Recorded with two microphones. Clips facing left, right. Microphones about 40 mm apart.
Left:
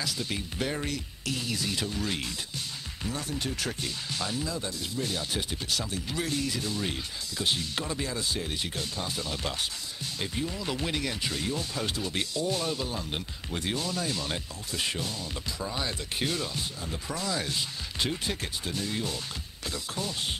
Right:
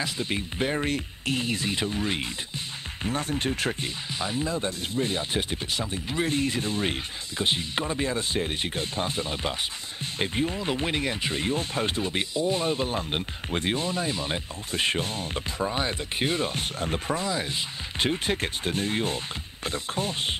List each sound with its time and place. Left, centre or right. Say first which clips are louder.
0.0 s speech: right 4 dB; right
3.0 s speech: right 6 dB; right
4.1 s speech: right 5 dB; right
14.7 s speech: right 6 dB; right
17.3 s speech: right 2 dB; right